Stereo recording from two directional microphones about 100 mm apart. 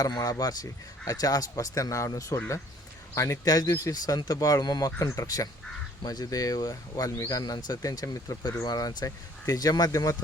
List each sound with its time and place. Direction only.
0.0 s speech: 40° left (ahead or behind)